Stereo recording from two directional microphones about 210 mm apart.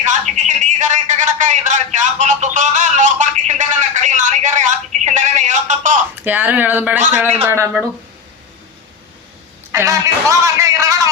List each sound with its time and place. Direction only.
0.0 s a man's voice: 35° right (ahead or behind)
6.2 s a man's voice: 10° right (ahead or behind)
9.7 s a man's voice: 15° right (ahead or behind)